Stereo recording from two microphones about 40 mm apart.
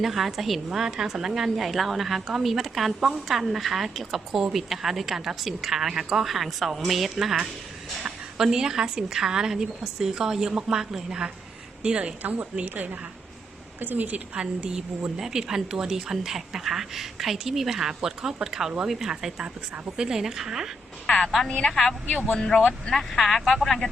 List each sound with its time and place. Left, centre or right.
0.0 s a woman's voice: centre
8.4 s a woman's voice: centre
11.8 s a woman's voice: right
12.6 s a woman's voice: right
14.3 s a woman's voice: right
21.1 s a woman's voice: centre